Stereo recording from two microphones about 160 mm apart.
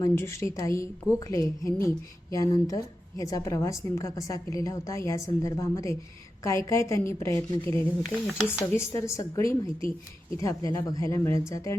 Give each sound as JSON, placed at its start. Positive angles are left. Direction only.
{"t": 0.0, "sound": "a woman's voice", "side_deg": 15}
{"t": 8.3, "sound": "speech", "side_deg": -5}
{"t": 8.7, "sound": "a woman's voice", "side_deg": 15}